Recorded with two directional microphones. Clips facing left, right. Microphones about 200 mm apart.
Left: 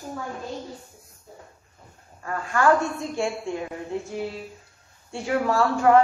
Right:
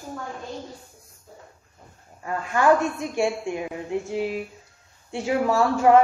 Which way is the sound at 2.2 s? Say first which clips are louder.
Right 1 dB; 20° right (ahead or behind).